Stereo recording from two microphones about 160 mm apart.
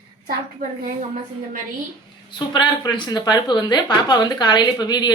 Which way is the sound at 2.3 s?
30° left (ahead or behind).